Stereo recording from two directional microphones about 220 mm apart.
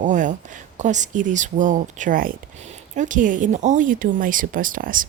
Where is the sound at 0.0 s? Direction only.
35° right (ahead or behind).